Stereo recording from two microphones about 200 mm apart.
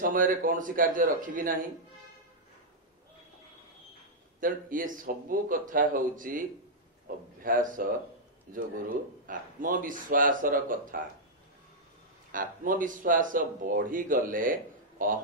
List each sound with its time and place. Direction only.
0.0 s speech: 40° right (ahead or behind)
4.4 s speech: 45° right (ahead or behind)
7.4 s speech: 40° right (ahead or behind)
12.3 s speech: 45° right (ahead or behind)